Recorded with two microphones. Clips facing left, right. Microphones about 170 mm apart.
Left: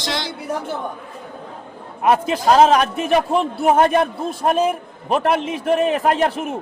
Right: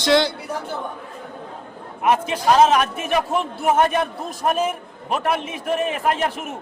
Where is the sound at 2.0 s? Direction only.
35° left (ahead or behind).